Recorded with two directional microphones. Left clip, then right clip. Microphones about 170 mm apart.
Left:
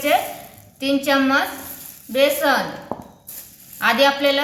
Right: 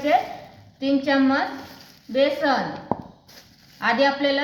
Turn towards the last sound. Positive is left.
turn(degrees=-20)  # may be behind; listen again after turning